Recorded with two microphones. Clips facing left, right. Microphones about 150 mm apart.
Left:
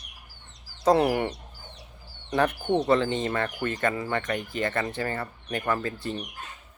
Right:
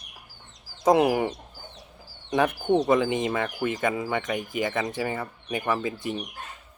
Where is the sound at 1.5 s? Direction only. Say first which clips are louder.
Right 2 dB; 40° right (ahead or behind).